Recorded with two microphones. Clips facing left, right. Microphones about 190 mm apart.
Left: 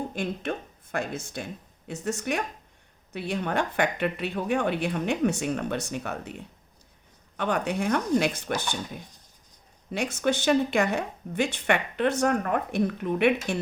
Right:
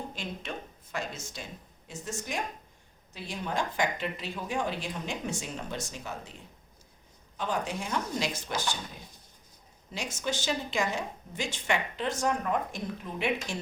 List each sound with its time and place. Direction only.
0.1 s a woman's voice: 55° left (ahead or behind)
9.9 s a woman's voice: 60° left (ahead or behind)